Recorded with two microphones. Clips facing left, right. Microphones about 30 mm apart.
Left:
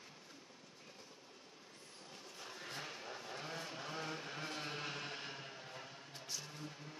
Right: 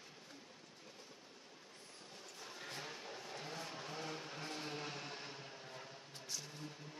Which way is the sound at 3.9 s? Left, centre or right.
Left.